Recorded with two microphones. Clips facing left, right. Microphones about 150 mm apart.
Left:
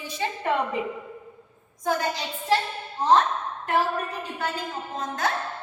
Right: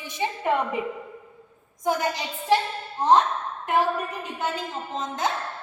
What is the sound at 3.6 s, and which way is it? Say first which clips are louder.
A woman's voice: right 1 dB; 20° right (ahead or behind).